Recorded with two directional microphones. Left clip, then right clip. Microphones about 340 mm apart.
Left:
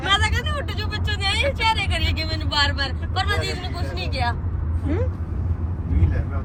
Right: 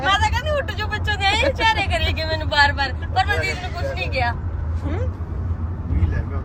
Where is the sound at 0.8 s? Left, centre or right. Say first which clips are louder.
Right 5 dB; centre.